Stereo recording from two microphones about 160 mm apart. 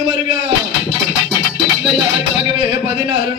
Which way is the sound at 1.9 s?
35° right (ahead or behind).